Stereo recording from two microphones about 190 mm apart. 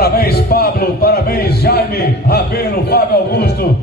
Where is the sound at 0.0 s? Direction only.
55° left (ahead or behind).